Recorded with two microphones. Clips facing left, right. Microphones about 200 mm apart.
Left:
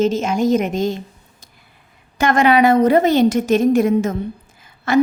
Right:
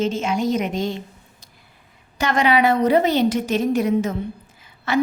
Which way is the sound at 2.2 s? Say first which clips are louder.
Left 4 dB; 50° left (ahead or behind).